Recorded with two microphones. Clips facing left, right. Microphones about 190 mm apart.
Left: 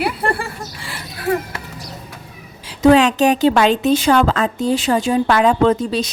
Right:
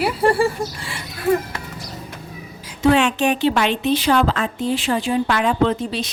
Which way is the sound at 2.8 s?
40° left (ahead or behind).